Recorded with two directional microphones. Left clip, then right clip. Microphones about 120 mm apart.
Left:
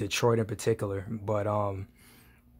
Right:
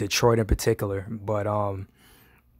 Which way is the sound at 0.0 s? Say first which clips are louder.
Right 5 dB; 40° right (ahead or behind).